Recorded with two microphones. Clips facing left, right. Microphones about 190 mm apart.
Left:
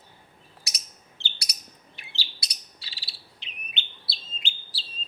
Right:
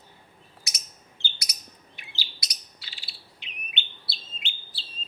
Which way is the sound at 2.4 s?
30° left (ahead or behind).